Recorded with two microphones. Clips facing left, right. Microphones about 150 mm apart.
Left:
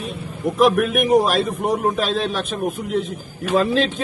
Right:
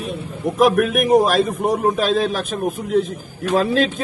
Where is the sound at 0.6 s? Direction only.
40° right (ahead or behind).